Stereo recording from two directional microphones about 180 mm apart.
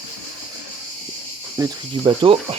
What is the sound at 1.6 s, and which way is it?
Speech, 20° right (ahead or behind).